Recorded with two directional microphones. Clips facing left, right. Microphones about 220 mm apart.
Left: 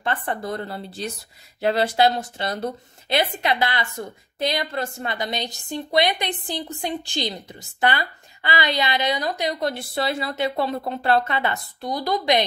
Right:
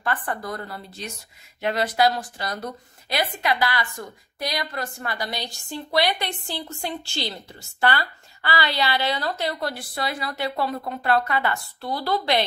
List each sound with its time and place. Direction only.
0.0 s speech: 25° left (ahead or behind)